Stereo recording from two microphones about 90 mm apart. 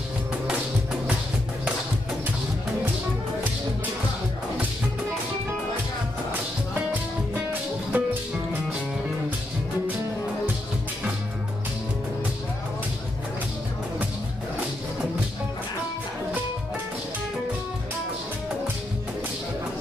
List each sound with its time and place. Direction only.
7.9 s music: 20° right (ahead or behind)